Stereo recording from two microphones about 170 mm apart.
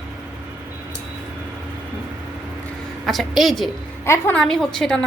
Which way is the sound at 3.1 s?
Centre (ahead or behind).